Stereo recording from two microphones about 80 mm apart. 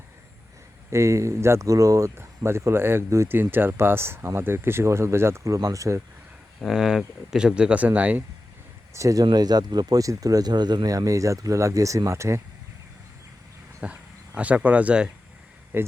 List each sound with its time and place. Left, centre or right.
0.9 s speech: right
5.5 s speech: right
6.6 s speech: centre
8.9 s speech: right
9.2 s speech: right
10.9 s speech: right
13.8 s speech: centre
15.7 s speech: right